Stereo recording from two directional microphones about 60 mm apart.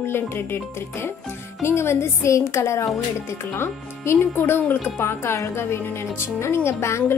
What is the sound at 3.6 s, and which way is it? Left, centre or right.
Speech, left.